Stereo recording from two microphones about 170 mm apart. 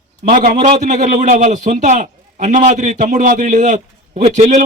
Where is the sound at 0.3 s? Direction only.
50° right (ahead or behind).